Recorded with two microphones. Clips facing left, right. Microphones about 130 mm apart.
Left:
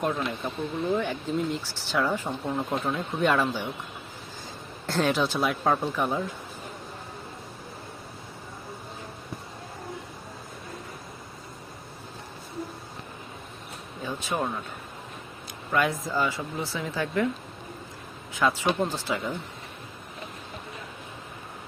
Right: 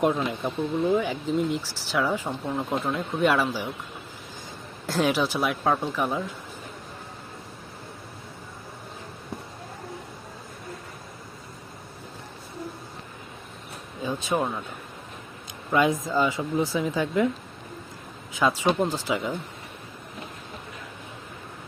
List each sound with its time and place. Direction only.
0.3 s speech: 10° right (ahead or behind)
4.9 s speech: 5° right (ahead or behind)
14.0 s a sound: 15° right (ahead or behind)
15.7 s speech: 20° right (ahead or behind)
18.3 s speech: 15° right (ahead or behind)